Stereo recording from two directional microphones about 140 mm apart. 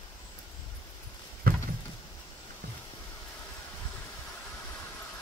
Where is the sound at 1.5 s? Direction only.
90° right.